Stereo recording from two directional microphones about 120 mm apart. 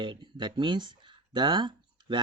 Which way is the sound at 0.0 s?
40° right (ahead or behind).